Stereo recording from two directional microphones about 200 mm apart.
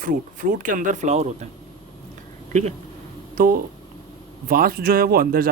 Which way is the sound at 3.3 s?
45° right (ahead or behind).